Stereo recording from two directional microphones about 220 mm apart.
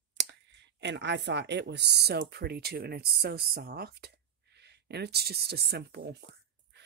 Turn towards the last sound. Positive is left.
turn(degrees=-45)  # may be behind; listen again after turning